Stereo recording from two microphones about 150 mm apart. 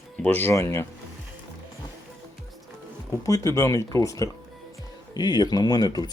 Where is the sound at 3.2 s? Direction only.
20° left (ahead or behind).